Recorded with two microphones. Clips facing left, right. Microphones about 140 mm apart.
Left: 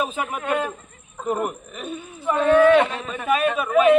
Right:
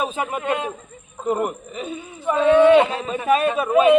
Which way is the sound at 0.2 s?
25° right (ahead or behind).